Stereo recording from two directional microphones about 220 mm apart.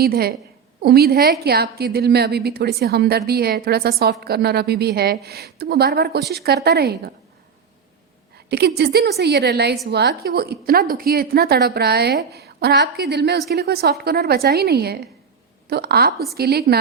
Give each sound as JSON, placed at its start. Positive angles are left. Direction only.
{"t": 0.0, "sound": "a woman's voice", "side_deg": -45}
{"t": 8.4, "sound": "a woman's voice", "side_deg": -50}